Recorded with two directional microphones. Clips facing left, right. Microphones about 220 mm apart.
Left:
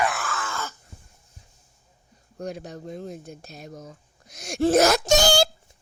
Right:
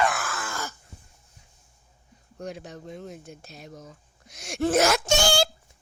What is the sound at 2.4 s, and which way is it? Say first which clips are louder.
Speech: left 3 dB; 40° left (ahead or behind).